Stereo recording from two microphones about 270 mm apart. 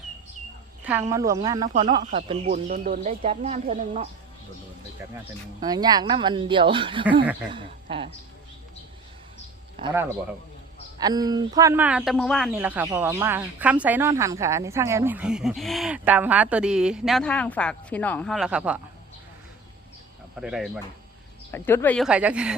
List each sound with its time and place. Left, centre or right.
0.9 s speech: centre
5.5 s speech: centre
9.8 s speech: centre
20.3 s speech: centre
21.5 s speech: centre